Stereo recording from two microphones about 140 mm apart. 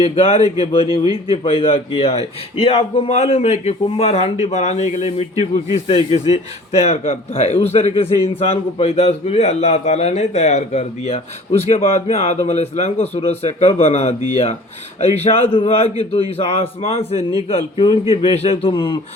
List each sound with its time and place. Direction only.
0.0 s a man's voice: 50° left (ahead or behind)